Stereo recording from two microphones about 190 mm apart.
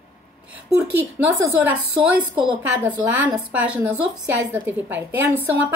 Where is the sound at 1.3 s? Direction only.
10° right (ahead or behind).